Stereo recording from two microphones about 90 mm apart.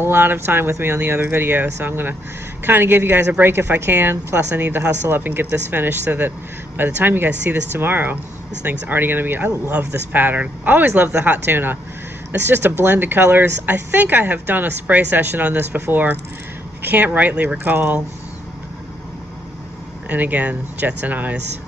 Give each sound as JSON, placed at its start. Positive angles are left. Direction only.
{"t": 0.0, "sound": "speech", "side_deg": -25}
{"t": 20.1, "sound": "speech", "side_deg": -20}